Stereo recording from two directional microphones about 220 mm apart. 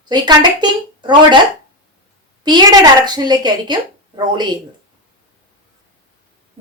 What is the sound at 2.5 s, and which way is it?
A woman's voice, 20° right (ahead or behind).